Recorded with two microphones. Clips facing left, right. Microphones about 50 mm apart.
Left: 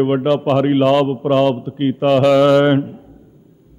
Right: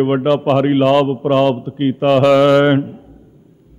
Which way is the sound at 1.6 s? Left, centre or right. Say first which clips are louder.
Right 1 dB; centre.